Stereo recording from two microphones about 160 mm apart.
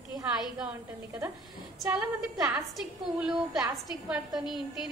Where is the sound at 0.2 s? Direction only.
5° right (ahead or behind).